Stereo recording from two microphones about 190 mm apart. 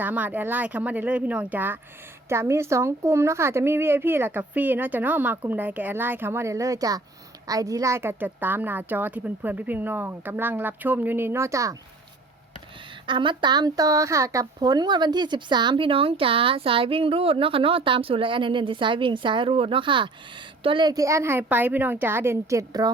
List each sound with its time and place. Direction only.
0.0 s speech: 10° right (ahead or behind)
13.1 s speech: 25° right (ahead or behind)